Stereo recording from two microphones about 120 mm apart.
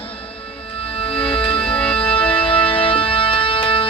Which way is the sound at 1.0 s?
45° left (ahead or behind).